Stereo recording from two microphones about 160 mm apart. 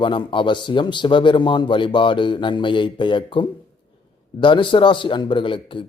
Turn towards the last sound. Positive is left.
turn(degrees=30)  # may be behind; listen again after turning